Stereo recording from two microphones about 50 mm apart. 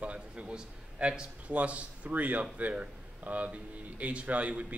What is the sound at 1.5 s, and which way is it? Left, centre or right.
Speech, right.